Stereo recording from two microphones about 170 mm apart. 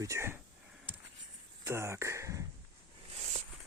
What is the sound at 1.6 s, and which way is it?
Speech, 15° right (ahead or behind).